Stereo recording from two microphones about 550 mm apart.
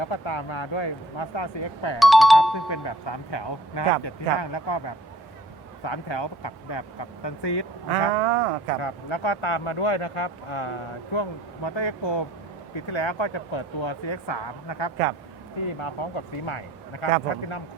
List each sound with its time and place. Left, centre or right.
0.0 s speech: left
2.0 s speech: centre
2.6 s speech: left
8.1 s speech: right
8.8 s speech: left
15.8 s speech: left